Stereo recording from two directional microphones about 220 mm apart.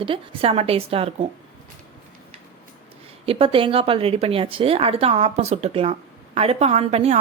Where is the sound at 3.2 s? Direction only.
25° right (ahead or behind).